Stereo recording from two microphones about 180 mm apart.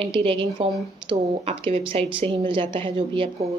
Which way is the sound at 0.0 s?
30° right (ahead or behind).